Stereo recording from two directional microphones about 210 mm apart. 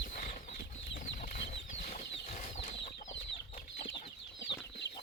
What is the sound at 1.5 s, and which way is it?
Bird flight, 30° left (ahead or behind).